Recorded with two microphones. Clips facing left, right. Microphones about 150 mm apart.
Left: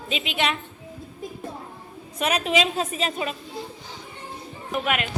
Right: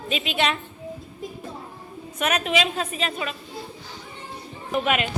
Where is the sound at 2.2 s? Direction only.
30° left (ahead or behind).